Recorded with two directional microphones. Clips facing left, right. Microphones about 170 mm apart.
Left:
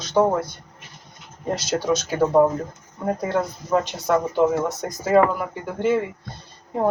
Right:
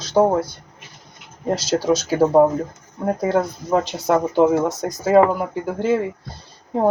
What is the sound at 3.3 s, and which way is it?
Speech, 30° right (ahead or behind).